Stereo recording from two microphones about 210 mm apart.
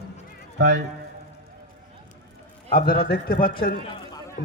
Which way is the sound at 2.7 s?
45° left (ahead or behind).